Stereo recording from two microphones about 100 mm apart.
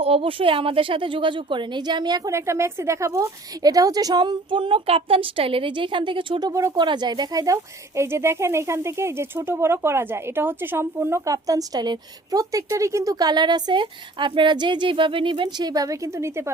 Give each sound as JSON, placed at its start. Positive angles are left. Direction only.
{"t": 0.0, "sound": "a woman's voice", "side_deg": -70}
{"t": 2.3, "sound": "a woman's voice", "side_deg": -30}
{"t": 6.5, "sound": "speech", "side_deg": -30}
{"t": 6.7, "sound": "speech", "side_deg": -50}